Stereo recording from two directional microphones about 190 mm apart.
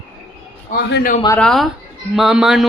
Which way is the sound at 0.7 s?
55° left (ahead or behind).